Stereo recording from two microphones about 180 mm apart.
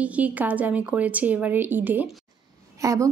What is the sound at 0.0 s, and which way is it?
A woman's voice, 10° right (ahead or behind).